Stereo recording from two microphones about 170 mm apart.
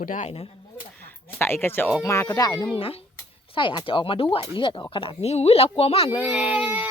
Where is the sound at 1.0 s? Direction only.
15° left (ahead or behind).